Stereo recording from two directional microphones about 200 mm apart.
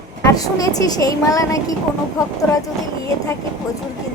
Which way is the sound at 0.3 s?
20° left (ahead or behind).